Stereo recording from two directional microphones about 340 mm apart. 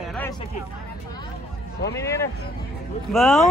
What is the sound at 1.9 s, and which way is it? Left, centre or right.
Speech, centre.